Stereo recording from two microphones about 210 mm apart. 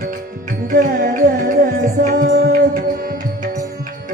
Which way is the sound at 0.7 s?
40° right (ahead or behind).